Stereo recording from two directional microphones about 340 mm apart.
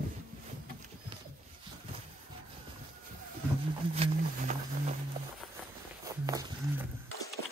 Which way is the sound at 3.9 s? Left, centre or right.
Centre.